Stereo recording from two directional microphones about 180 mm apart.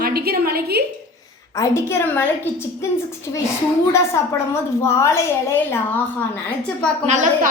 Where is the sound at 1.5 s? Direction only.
15° left (ahead or behind).